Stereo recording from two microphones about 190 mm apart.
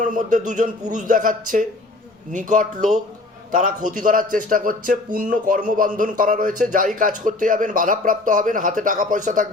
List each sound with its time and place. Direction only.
0.0 s speech: 40° right (ahead or behind)